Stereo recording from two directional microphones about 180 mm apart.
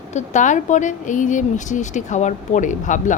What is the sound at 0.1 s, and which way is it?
A woman's voice, 40° left (ahead or behind).